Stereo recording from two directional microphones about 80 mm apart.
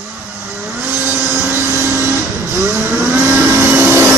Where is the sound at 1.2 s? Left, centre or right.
Right.